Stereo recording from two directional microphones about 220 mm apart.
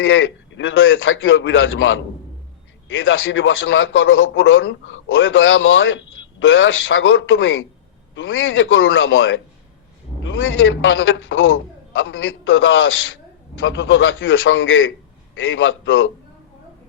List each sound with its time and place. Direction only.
0.0 s a man's voice: 60° left (ahead or behind)